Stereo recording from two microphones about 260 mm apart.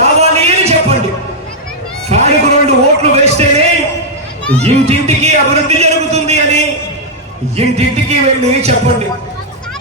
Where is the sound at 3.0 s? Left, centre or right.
Right.